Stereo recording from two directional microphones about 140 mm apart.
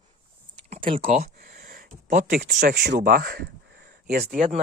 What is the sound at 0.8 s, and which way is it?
Speech, 40° right (ahead or behind).